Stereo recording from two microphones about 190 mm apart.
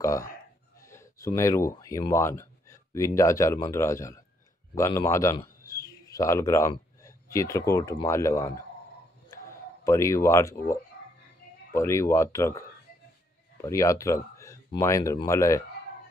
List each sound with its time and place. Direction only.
0.0 s a man's voice: 15° left (ahead or behind)
9.3 s a sound: 15° left (ahead or behind)
11.7 s speech: 15° left (ahead or behind)